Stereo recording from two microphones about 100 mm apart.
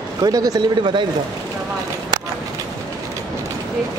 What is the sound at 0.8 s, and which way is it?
Speech, 55° right (ahead or behind).